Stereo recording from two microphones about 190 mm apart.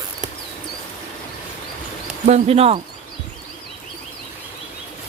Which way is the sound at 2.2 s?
35° right (ahead or behind).